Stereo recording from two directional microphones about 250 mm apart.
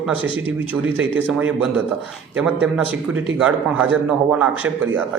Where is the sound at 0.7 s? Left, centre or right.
Centre.